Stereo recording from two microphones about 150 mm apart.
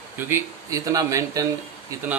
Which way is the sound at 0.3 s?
20° right (ahead or behind).